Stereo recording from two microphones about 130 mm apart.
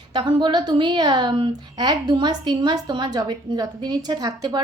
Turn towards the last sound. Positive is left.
turn(degrees=-30)  # may be behind; listen again after turning